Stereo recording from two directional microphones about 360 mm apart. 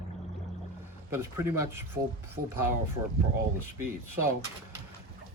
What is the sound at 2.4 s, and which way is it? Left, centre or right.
Speech, right.